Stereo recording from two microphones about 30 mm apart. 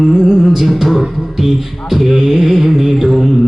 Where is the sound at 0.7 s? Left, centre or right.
Centre.